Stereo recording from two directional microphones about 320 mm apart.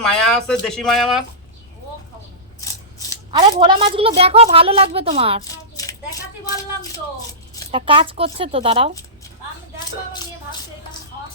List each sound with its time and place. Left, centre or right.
0.0 s speech: centre
3.3 s a woman's voice: centre
7.7 s a woman's voice: centre